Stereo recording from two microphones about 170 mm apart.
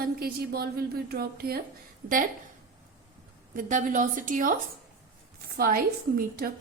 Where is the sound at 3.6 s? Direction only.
50° right (ahead or behind).